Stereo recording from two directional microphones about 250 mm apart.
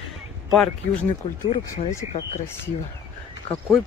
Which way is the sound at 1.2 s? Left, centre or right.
Centre.